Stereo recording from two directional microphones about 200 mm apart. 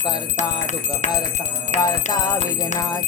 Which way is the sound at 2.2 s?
20° left (ahead or behind).